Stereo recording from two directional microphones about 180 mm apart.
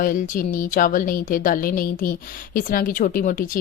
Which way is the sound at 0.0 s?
50° left (ahead or behind).